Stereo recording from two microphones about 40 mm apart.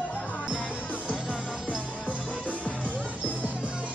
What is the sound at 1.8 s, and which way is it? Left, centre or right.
Music, right.